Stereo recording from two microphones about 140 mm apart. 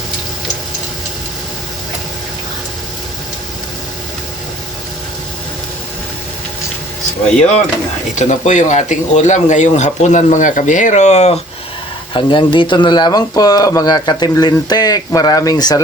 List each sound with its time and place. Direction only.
8.1 s speech: 60° left (ahead or behind)
12.1 s speech: 35° left (ahead or behind)